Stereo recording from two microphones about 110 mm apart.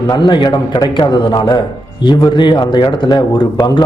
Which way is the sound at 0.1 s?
45° left (ahead or behind).